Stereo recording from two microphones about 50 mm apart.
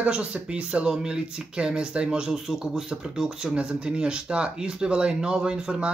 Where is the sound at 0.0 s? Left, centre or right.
Centre.